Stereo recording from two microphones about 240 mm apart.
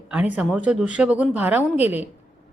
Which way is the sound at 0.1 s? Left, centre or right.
Centre.